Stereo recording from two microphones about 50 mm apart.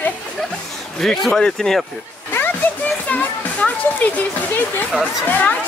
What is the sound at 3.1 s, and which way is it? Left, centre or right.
Music, left.